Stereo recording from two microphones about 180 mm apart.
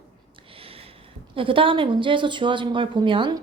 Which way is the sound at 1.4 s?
30° right (ahead or behind).